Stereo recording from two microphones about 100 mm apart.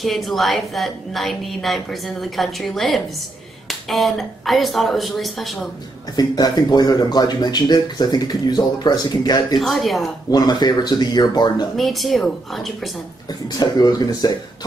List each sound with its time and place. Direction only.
0.0 s a woman's voice: centre (ahead or behind)
6.1 s speech: 45° left (ahead or behind)
9.6 s a woman's voice: centre (ahead or behind)
10.3 s speech: 45° left (ahead or behind)
11.7 s a woman's voice: centre (ahead or behind)
13.3 s speech: 45° left (ahead or behind)